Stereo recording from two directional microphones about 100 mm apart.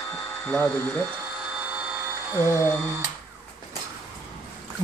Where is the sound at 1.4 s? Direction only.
10° right (ahead or behind).